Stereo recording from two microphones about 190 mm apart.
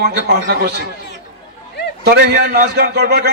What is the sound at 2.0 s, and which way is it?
A man's voice, 55° right (ahead or behind).